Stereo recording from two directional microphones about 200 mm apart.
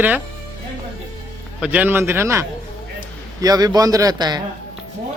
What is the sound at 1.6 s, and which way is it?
A man's voice, 5° right (ahead or behind).